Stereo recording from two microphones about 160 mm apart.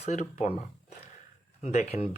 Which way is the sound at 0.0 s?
45° left (ahead or behind).